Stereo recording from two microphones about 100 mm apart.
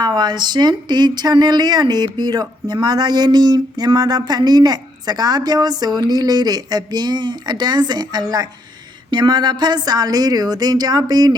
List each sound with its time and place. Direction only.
0.0 s speech: 45° right (ahead or behind)